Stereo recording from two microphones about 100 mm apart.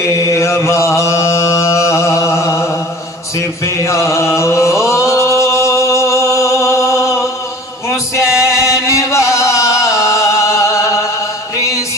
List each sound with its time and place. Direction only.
0.3 s chant: 30° left (ahead or behind)
3.3 s mantra: 30° left (ahead or behind)
8.2 s music: 30° left (ahead or behind)